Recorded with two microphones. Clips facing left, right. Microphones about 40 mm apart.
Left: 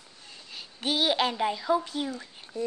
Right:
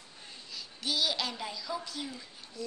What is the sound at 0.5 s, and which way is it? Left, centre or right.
A child's voice, left.